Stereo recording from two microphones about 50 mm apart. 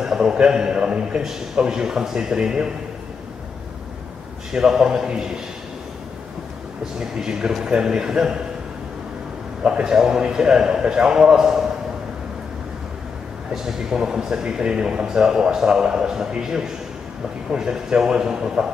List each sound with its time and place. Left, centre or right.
0.0 s speech: centre
4.5 s speech: centre
7.0 s speech: centre
9.7 s speech: centre
13.5 s speech: centre